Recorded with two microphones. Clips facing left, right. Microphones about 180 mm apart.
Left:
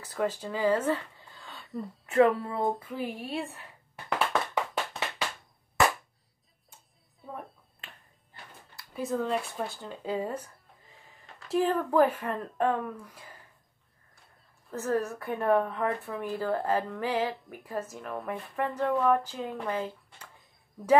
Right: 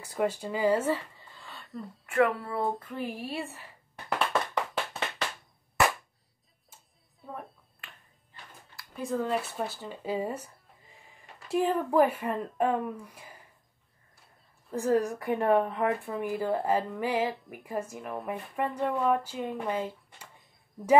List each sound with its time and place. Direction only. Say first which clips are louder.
0.0 s speech: right 1 dB; 10° right (ahead or behind)
2.0 s speech: left 3 dB; 20° left (ahead or behind)
2.7 s speech: left 1 dB; 5° left (ahead or behind)
6.7 s a sound: even; centre (ahead or behind)
8.9 s speech: even; centre (ahead or behind)
14.7 s a woman's voice: right 3 dB; 15° right (ahead or behind)